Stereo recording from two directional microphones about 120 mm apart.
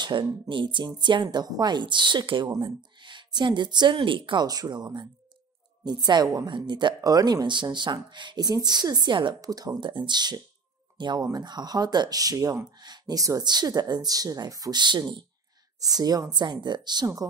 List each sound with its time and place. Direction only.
0.0 s speech: 40° right (ahead or behind)